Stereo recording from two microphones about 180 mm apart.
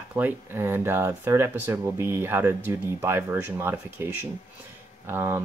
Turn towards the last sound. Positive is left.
turn(degrees=-15)  # may be behind; listen again after turning